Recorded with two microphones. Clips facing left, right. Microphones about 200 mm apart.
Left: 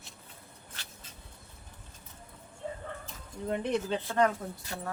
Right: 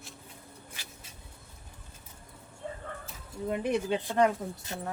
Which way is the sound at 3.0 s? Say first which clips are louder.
Right 2 dB; 5° right (ahead or behind).